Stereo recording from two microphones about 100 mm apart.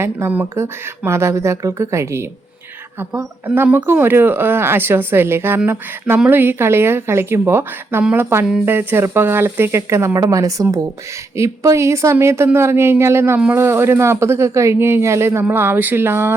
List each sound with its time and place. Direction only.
0.0 s a man's voice: 20° right (ahead or behind)
3.4 s a man's voice: 20° right (ahead or behind)